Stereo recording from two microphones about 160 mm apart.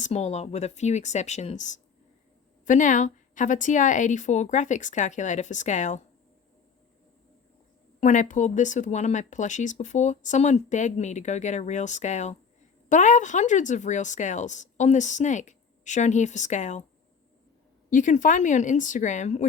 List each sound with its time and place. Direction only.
0.0 s speech: 45° left (ahead or behind)
8.0 s speech: 50° left (ahead or behind)
17.9 s speech: 55° left (ahead or behind)